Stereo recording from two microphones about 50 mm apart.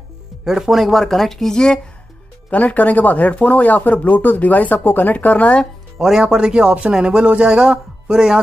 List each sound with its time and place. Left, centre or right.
0.5 s speech: centre
2.5 s speech: left
5.9 s speech: centre